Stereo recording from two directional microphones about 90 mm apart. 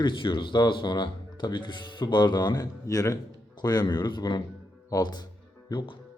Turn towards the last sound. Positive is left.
turn(degrees=55)  # may be behind; listen again after turning